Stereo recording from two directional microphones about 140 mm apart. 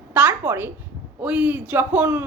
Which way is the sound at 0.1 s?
10° right (ahead or behind).